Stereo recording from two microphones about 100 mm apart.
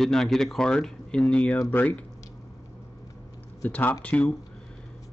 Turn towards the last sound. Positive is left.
turn(degrees=15)  # may be behind; listen again after turning